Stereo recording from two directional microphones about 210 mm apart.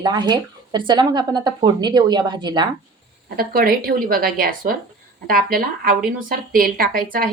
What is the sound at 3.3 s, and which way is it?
A woman's voice, 45° right (ahead or behind).